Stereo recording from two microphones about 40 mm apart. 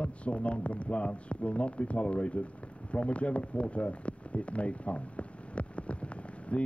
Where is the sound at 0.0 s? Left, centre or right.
Left.